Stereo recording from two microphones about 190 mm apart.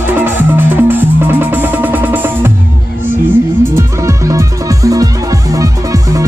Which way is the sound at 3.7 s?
15° right (ahead or behind).